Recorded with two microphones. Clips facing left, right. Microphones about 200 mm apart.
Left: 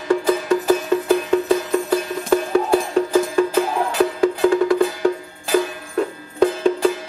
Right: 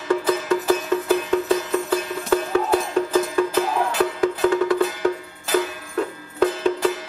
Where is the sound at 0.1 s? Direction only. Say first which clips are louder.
Left 3 dB; 10° left (ahead or behind).